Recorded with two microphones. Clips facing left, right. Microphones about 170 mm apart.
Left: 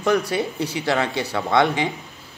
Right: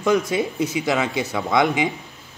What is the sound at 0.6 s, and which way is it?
Speech, 30° left (ahead or behind).